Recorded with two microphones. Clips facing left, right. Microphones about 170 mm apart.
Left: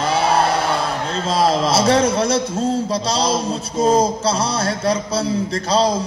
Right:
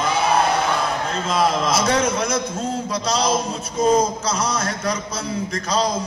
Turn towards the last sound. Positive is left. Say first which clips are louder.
# left 4 dB
turn(degrees=30)  # may be behind; listen again after turning